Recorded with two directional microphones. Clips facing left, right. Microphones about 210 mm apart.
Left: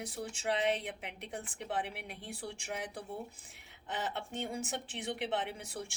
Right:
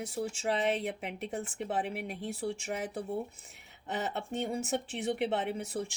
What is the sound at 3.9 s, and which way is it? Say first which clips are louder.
A woman's voice: right 4 dB; 45° right (ahead or behind).